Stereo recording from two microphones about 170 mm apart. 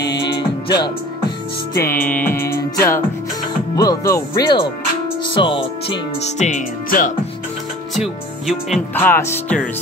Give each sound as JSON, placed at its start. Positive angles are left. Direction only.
{"t": 0.0, "sound": "music", "side_deg": 85}
{"t": 0.7, "sound": "speech", "side_deg": 25}
{"t": 1.8, "sound": "music", "side_deg": 10}
{"t": 3.7, "sound": "speech", "side_deg": 20}
{"t": 6.3, "sound": "speech", "side_deg": 45}
{"t": 7.9, "sound": "speech", "side_deg": 0}
{"t": 8.9, "sound": "music", "side_deg": 10}